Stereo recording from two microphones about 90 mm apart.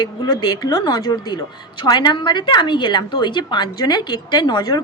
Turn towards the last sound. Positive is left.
turn(degrees=50)  # may be behind; listen again after turning